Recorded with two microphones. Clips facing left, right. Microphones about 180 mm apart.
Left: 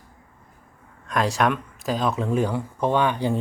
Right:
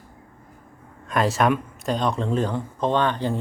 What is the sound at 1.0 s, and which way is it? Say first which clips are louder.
Speech: right 1 dB; centre (ahead or behind).